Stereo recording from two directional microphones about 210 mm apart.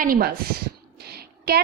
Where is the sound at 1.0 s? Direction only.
50° right (ahead or behind).